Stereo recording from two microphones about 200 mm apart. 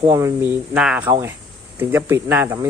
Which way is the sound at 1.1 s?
15° right (ahead or behind).